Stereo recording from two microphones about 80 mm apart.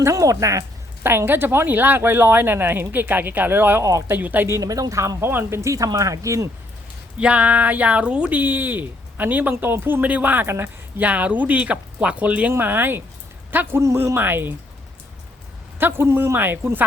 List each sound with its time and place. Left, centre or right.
0.0 s speech: right
1.0 s speech: right
4.4 s speech: right
5.3 s speech: right
7.2 s speech: centre; by 11.0 s right
11.0 s speech: centre
15.8 s speech: right